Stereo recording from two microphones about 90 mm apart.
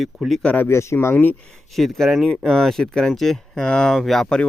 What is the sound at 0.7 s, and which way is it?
Speech, 30° left (ahead or behind).